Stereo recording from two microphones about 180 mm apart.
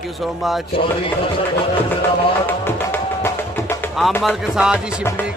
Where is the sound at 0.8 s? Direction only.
30° left (ahead or behind).